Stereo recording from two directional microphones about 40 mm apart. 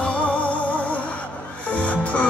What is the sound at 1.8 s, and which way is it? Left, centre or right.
Music, left.